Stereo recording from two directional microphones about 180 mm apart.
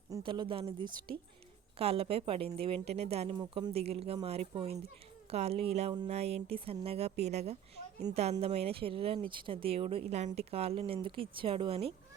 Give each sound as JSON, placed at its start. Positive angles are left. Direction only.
{"t": 0.1, "sound": "speech", "side_deg": -25}
{"t": 3.3, "sound": "speech", "side_deg": -25}